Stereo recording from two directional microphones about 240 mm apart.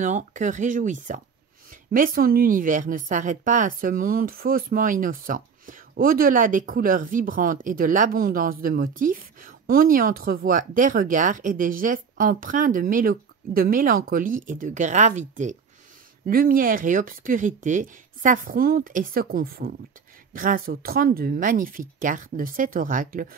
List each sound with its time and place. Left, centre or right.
0.0 s a woman's voice: right